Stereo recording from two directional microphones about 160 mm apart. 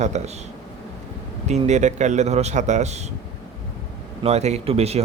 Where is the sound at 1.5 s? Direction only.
45° right (ahead or behind).